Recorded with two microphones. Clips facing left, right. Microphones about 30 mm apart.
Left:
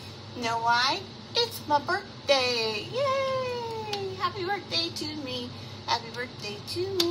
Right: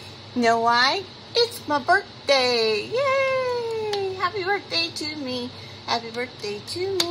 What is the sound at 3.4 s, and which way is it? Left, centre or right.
Cat, right.